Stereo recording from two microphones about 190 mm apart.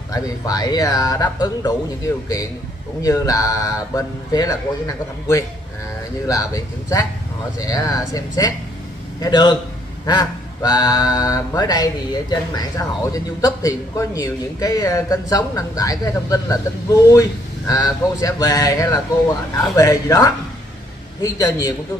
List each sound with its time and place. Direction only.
0.1 s speech: 20° left (ahead or behind)
3.0 s speech: 20° left (ahead or behind)